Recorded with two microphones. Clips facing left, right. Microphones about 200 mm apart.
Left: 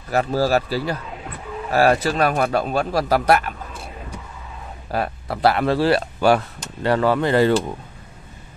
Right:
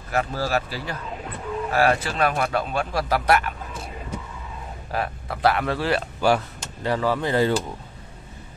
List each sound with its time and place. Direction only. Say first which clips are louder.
0.1 s speech: left 6 dB; 35° left (ahead or behind)
4.9 s speech: left 4 dB; 35° left (ahead or behind)
6.2 s speech: left 3 dB; 65° left (ahead or behind)